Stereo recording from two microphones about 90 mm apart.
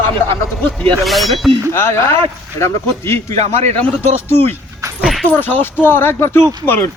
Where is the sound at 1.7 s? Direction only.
30° left (ahead or behind).